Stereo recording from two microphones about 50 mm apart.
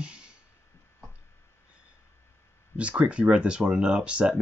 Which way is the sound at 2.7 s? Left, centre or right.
Right.